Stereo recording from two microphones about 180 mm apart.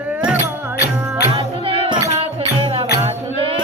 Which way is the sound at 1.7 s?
30° right (ahead or behind).